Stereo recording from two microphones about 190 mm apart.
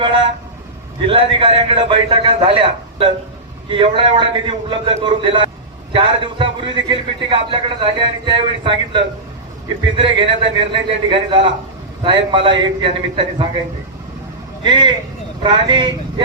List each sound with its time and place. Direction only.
1.0 s a man's voice: 25° right (ahead or behind)
14.6 s a man's voice: 25° right (ahead or behind)